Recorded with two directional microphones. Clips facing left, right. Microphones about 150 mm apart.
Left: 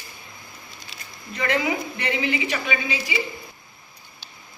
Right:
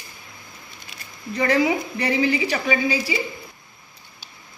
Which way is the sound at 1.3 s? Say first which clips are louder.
Right 4 dB; 35° right (ahead or behind).